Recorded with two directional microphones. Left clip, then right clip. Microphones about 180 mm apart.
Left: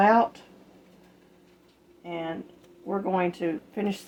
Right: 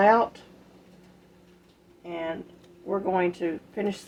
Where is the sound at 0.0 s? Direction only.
40° left (ahead or behind).